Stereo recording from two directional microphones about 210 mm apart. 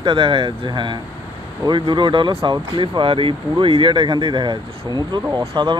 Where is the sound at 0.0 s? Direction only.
25° right (ahead or behind).